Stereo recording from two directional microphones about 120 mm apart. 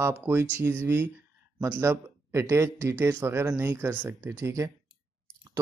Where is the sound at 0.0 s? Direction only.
15° right (ahead or behind).